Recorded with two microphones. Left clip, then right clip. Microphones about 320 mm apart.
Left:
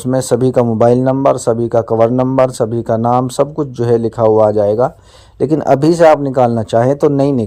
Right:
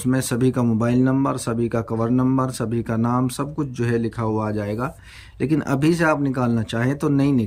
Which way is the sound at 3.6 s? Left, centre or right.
Centre.